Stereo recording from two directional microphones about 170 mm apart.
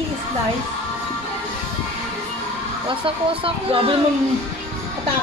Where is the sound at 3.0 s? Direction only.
30° right (ahead or behind).